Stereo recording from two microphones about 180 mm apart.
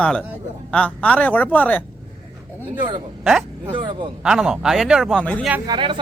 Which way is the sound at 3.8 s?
25° right (ahead or behind).